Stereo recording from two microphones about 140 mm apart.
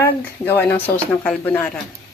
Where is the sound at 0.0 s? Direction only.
15° left (ahead or behind).